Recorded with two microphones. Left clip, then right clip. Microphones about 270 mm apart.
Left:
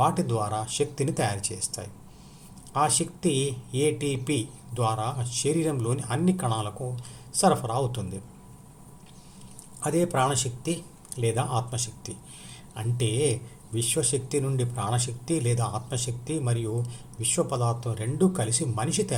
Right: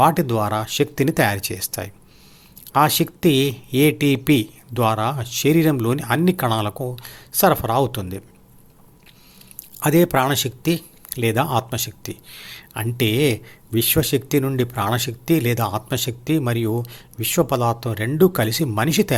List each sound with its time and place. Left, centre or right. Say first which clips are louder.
0.0 s speech: right 8 dB; right
9.8 s speech: right 8 dB; right